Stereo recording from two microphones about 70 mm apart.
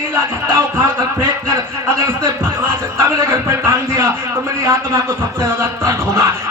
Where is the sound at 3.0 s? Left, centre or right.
Right.